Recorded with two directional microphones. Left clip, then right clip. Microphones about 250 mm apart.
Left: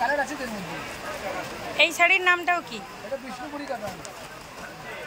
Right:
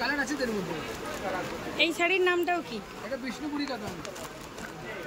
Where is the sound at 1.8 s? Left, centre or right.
Centre.